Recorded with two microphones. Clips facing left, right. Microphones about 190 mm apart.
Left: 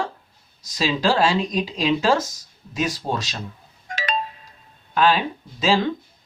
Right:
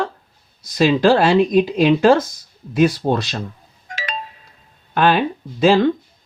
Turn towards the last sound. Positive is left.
turn(degrees=-55)  # may be behind; listen again after turning